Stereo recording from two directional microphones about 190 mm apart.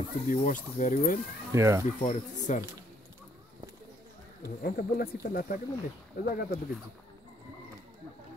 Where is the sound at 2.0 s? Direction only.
35° left (ahead or behind).